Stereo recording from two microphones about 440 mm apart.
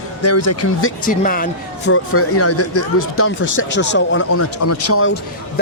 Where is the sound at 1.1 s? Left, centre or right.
Centre.